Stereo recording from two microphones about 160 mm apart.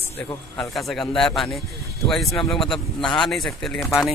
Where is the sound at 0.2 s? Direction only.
10° left (ahead or behind).